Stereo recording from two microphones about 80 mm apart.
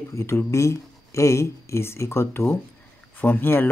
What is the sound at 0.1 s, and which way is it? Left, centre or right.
Speech, left.